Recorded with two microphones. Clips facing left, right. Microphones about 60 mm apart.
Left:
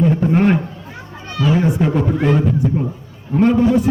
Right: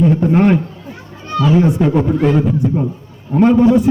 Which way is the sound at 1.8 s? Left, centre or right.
Centre.